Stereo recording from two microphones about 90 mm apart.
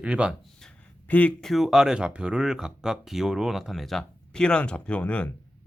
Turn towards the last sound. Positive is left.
turn(degrees=15)  # may be behind; listen again after turning